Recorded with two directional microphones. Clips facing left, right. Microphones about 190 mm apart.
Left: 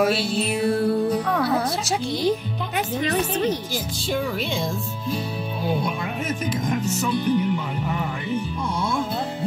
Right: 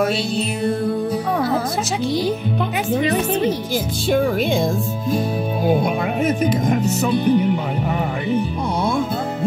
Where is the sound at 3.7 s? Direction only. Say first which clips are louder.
Right 7 dB; 55° right (ahead or behind).